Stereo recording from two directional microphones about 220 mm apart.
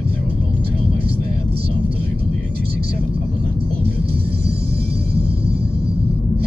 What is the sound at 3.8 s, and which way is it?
Music, 45° right (ahead or behind).